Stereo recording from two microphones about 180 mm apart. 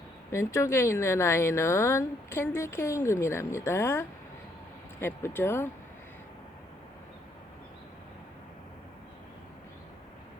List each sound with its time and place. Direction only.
0.3 s speech: 15° left (ahead or behind)